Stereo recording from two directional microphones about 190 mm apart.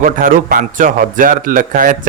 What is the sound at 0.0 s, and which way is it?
A man's voice, 45° right (ahead or behind).